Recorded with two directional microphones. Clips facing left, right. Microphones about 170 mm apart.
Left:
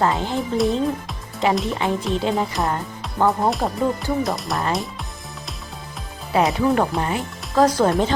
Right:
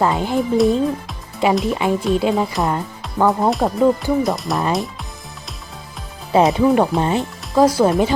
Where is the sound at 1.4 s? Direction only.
10° right (ahead or behind).